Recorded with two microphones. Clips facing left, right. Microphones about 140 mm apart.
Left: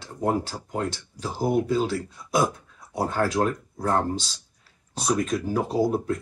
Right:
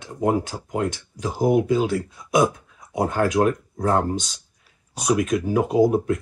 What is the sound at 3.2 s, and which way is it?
Speech, 15° right (ahead or behind).